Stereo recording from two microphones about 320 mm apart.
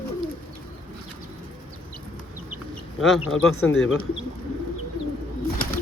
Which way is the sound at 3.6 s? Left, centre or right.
Left.